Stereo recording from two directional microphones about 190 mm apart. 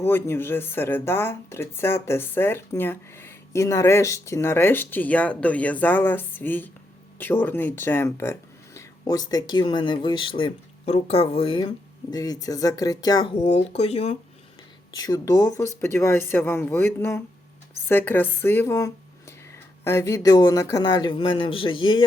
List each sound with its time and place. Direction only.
0.0 s speech: 10° left (ahead or behind)
13.4 s speech: 35° left (ahead or behind)
14.9 s speech: 20° left (ahead or behind)